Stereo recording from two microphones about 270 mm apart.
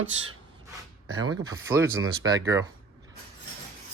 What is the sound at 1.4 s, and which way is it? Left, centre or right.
Speech, centre.